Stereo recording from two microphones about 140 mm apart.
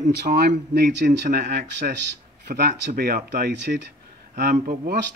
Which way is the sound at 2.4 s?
90° right.